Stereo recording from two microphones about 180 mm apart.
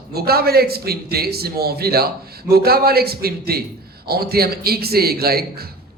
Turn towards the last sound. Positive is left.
turn(degrees=-60)  # may be behind; listen again after turning